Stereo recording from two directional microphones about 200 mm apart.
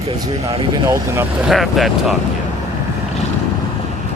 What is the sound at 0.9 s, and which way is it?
Speech, 15° right (ahead or behind).